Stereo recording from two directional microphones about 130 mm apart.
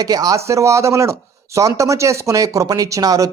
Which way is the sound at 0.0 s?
30° right (ahead or behind).